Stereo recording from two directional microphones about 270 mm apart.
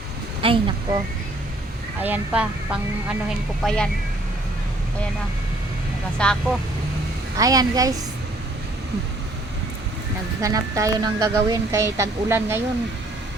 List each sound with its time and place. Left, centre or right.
0.4 s speech: centre
2.0 s speech: centre
6.1 s speech: centre
7.3 s speech: centre
10.4 s speech: centre